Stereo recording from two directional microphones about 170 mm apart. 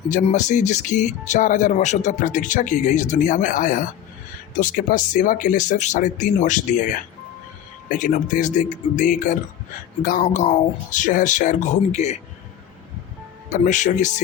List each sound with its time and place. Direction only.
0.3 s speech: 45° left (ahead or behind)
13.5 s speech: 45° left (ahead or behind)